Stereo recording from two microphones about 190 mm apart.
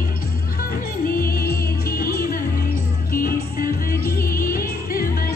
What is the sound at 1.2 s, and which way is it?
Music, 50° left (ahead or behind).